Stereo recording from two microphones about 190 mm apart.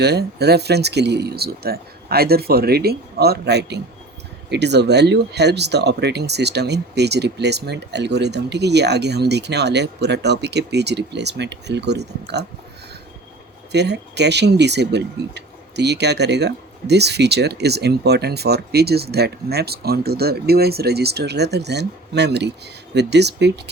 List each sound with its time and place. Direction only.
0.0 s speech: 60° right (ahead or behind)
13.7 s speech: 65° right (ahead or behind)